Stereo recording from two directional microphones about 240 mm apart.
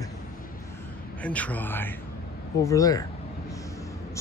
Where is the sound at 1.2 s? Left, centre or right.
Centre.